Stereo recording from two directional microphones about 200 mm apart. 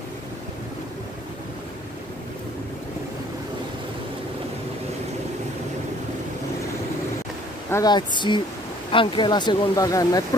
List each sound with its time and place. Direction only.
7.7 s speech: 20° left (ahead or behind)